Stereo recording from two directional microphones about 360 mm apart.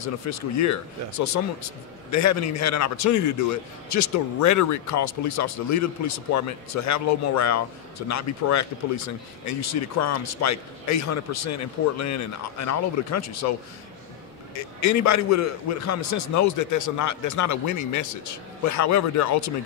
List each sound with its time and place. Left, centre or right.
0.0 s a man's voice: left
2.0 s a man's voice: left
14.8 s a man's voice: left